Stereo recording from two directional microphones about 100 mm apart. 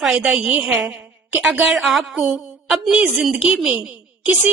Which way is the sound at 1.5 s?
5° right (ahead or behind).